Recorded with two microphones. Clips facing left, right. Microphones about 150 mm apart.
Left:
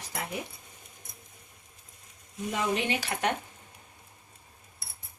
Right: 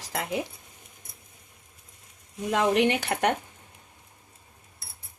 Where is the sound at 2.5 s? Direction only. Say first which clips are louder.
Right 7 dB; 80° right; by 3.3 s 55° right (ahead or behind).